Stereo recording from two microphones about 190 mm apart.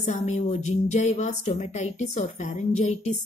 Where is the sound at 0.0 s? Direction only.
40° left (ahead or behind).